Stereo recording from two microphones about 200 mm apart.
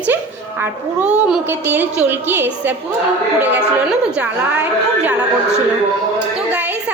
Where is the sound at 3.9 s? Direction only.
5° right (ahead or behind).